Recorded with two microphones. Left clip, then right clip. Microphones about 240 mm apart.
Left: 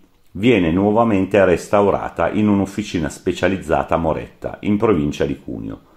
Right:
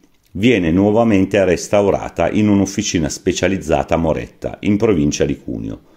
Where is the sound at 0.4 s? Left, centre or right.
Right.